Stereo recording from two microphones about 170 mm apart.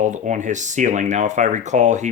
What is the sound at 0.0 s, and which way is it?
Speech, 45° right (ahead or behind).